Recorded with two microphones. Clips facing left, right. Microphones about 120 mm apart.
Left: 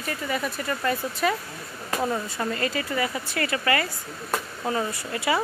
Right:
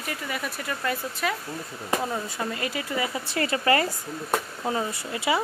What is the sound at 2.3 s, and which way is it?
Speech, 10° right (ahead or behind).